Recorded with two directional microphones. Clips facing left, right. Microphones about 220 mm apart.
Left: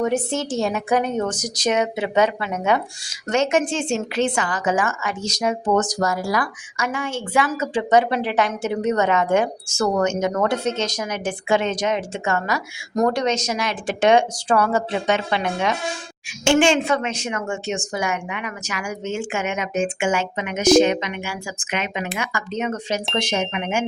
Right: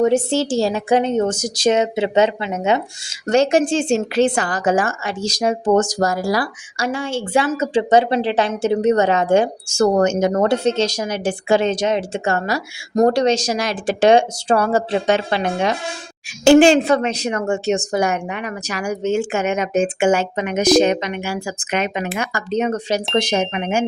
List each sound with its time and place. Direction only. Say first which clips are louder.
0.0 s a woman's voice: right 6 dB; 30° right (ahead or behind)
3.2 s a woman's voice: right 5 dB; 35° right (ahead or behind)